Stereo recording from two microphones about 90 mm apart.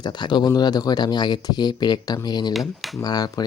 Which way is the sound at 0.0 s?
55° left (ahead or behind).